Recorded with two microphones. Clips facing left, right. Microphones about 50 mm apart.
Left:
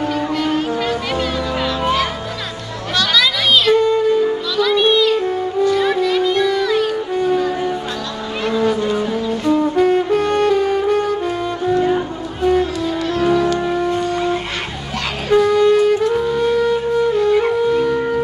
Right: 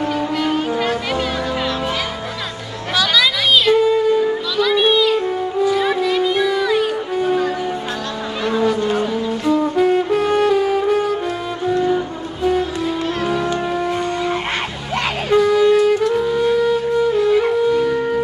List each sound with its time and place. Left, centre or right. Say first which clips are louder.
0.2 s music: left 1 dB; centre
9.0 s music: left 1 dB; centre
11.7 s music: left 1 dB; left
13.2 s music: left 7 dB; centre
13.7 s shofar: left 2 dB; centre
15.3 s wind instrument: left 1 dB; centre
16.1 s music: even; centre